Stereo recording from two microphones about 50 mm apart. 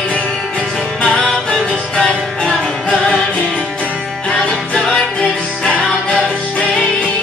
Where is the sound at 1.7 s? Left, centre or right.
Centre.